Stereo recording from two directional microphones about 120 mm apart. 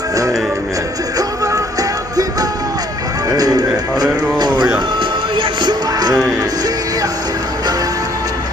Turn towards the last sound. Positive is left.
turn(degrees=-35)  # may be behind; listen again after turning